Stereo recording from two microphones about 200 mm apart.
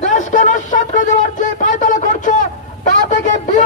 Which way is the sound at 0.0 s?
40° left (ahead or behind).